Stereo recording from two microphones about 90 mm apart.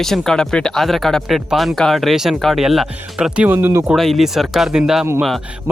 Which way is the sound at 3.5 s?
20° right (ahead or behind).